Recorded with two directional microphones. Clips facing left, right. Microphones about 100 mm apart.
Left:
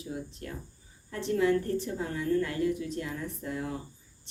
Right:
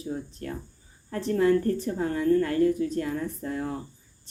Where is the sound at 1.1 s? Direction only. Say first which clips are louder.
Right 4 dB; 40° right (ahead or behind).